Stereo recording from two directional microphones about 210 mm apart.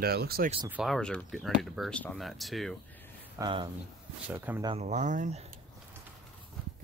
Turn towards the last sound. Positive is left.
turn(degrees=-35)  # may be behind; listen again after turning